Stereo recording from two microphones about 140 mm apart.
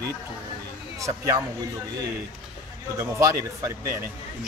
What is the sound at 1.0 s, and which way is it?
Speech, 20° right (ahead or behind).